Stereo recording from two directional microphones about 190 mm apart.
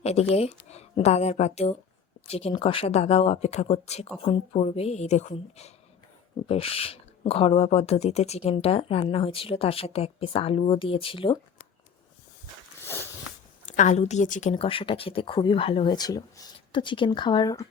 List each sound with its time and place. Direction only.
0.0 s a woman's voice: 35° left (ahead or behind)
13.7 s speech: 40° left (ahead or behind)
14.5 s speech: 30° left (ahead or behind)